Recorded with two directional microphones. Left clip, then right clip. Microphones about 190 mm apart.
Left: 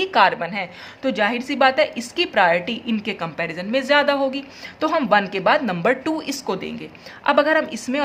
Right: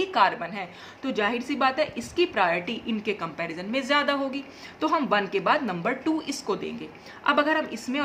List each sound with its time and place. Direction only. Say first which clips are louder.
0.0 s a woman's voice: left 6 dB; 35° left (ahead or behind)